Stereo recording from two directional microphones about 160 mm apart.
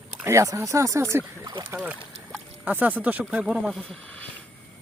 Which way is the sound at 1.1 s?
20° right (ahead or behind).